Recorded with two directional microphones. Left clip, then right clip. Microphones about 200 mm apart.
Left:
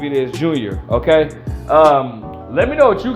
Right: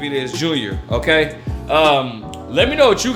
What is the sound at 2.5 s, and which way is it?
Speech, 20° right (ahead or behind).